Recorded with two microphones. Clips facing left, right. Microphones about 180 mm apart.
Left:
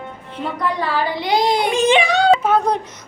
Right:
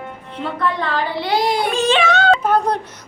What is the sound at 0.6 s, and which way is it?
Speech, 10° left (ahead or behind).